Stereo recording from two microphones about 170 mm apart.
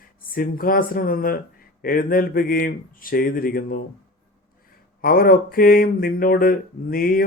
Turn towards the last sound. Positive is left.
turn(degrees=60)  # may be behind; listen again after turning